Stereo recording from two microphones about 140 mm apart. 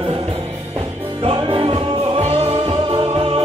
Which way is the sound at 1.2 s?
40° right (ahead or behind).